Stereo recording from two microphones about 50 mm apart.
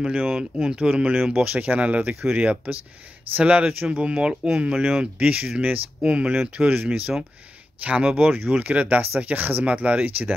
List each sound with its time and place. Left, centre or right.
0.0 s speech: centre
5.2 s speech: right